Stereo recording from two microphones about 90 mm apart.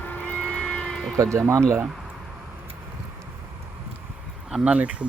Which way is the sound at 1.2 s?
35° right (ahead or behind).